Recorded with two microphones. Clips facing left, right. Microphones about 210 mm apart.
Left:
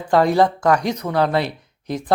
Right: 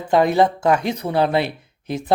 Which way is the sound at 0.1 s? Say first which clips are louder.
Even; 20° right (ahead or behind).